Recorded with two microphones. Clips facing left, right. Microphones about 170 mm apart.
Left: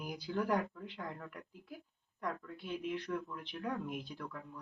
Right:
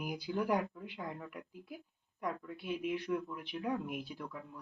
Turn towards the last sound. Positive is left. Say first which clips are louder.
# right 1 dB
turn(degrees=-10)  # may be behind; listen again after turning